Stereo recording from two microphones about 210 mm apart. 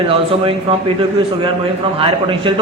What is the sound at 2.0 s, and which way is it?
Speech, 25° right (ahead or behind).